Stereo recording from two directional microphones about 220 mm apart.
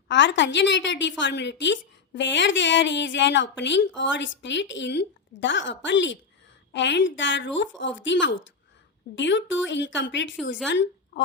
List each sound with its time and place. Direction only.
0.1 s a woman's voice: 55° left (ahead or behind)